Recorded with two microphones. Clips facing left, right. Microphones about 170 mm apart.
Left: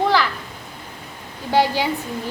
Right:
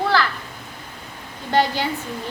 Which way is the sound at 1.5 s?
10° left (ahead or behind).